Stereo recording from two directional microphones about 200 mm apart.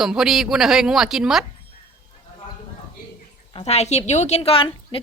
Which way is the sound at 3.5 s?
30° left (ahead or behind).